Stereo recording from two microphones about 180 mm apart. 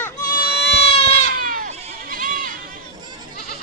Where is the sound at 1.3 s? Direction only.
50° right (ahead or behind).